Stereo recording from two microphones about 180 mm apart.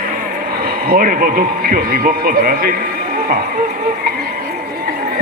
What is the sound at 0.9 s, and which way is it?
A man's voice, 50° right (ahead or behind).